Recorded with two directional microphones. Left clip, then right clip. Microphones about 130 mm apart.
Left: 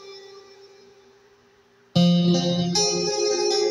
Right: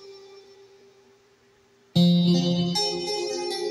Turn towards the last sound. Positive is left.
turn(degrees=40)  # may be behind; listen again after turning